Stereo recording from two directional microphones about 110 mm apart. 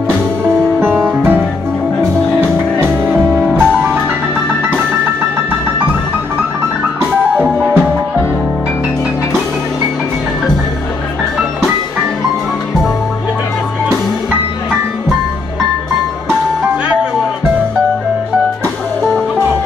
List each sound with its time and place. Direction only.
0.4 s music: 20° right (ahead or behind)
0.9 s music: 5° right (ahead or behind)
3.5 s music: 15° right (ahead or behind)
7.3 s music: 5° right (ahead or behind)